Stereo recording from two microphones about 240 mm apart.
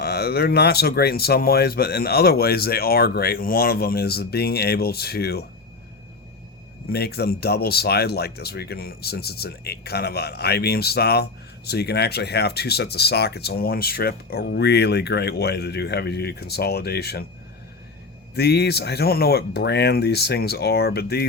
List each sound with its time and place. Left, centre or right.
0.0 s speech: left
6.8 s speech: left
18.3 s speech: left